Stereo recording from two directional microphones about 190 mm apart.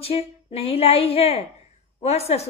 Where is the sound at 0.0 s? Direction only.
30° left (ahead or behind).